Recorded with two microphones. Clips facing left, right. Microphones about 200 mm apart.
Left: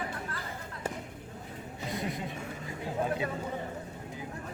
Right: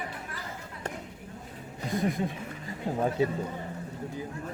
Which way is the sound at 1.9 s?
50° right (ahead or behind).